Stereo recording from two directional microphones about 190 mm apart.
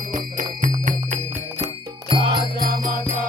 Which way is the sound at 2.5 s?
50° right (ahead or behind).